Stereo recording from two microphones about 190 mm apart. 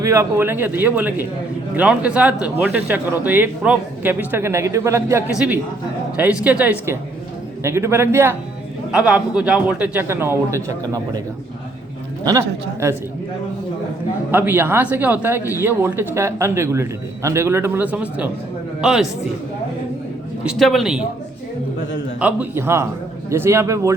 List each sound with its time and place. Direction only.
0.0 s speech: 15° right (ahead or behind)
12.2 s speech: 15° right (ahead or behind)
14.3 s a man's voice: 10° right (ahead or behind)
20.4 s a man's voice: centre (ahead or behind)
22.2 s speech: 10° right (ahead or behind)